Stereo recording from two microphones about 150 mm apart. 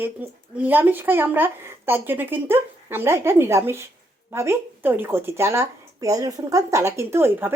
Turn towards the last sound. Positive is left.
turn(degrees=-15)  # may be behind; listen again after turning